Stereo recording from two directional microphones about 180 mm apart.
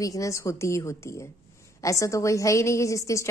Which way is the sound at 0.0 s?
20° left (ahead or behind).